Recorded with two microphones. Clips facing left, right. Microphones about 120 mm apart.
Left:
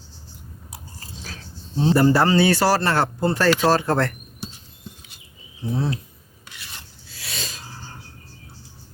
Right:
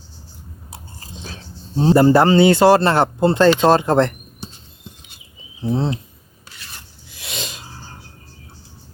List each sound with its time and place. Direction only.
0.7 s biting: 25° right (ahead or behind)
1.7 s speech: 40° right (ahead or behind)
2.0 s speech: 25° right (ahead or behind)
5.6 s speech: 25° right (ahead or behind)
7.1 s a sound: 20° right (ahead or behind)